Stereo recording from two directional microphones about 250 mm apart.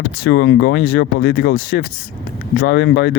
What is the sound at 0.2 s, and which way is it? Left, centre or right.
Speech, left.